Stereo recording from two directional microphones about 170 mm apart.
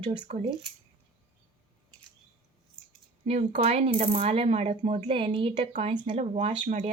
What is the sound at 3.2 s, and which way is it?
Speech, 40° right (ahead or behind).